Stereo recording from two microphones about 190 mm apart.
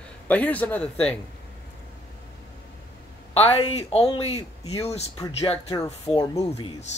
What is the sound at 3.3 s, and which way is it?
Speech, 35° left (ahead or behind).